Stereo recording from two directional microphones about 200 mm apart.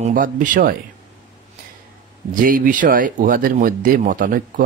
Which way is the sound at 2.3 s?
45° right (ahead or behind).